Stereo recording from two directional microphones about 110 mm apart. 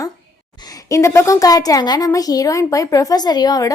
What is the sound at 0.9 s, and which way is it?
A woman's voice, 25° left (ahead or behind).